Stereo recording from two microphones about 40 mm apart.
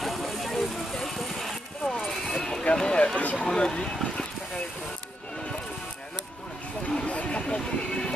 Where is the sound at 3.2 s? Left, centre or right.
Left.